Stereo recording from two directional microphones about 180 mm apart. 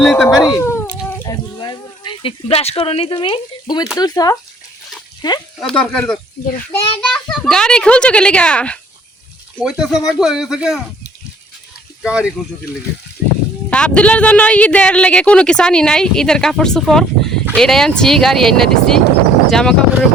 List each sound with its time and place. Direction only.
0.0 s a man's voice: centre (ahead or behind)
0.3 s cat: 20° left (ahead or behind)
1.2 s speech: 25° left (ahead or behind)
5.5 s a man's voice: 5° left (ahead or behind)
12.0 s a man's voice: 5° right (ahead or behind)
13.7 s a man's voice: 5° left (ahead or behind)